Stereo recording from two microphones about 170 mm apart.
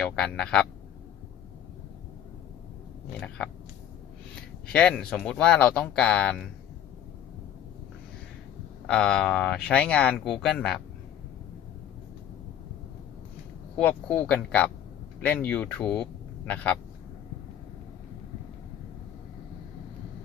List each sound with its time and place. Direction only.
0.0 s speech: 5° left (ahead or behind)
3.2 s speech: 5° left (ahead or behind)
4.6 s speech: 5° left (ahead or behind)
8.9 s speech: 5° left (ahead or behind)
13.7 s speech: 5° left (ahead or behind)